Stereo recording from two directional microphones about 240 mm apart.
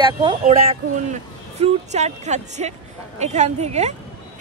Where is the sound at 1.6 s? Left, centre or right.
Right.